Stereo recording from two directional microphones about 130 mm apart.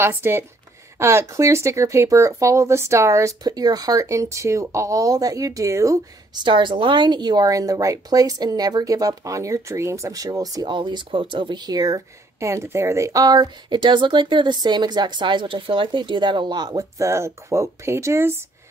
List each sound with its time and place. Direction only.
0.0 s speech: 15° right (ahead or behind)
6.4 s speech: 40° right (ahead or behind); by 18.4 s 20° right (ahead or behind)